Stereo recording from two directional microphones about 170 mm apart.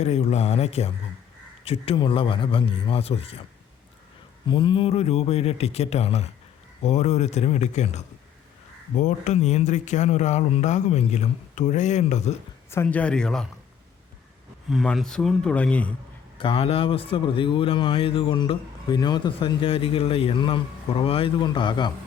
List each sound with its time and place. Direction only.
0.0 s speech: 40° left (ahead or behind)
4.4 s speech: 30° left (ahead or behind)
12.7 s speech: 10° left (ahead or behind)
14.7 s speech: centre (ahead or behind)
16.4 s speech: 35° left (ahead or behind)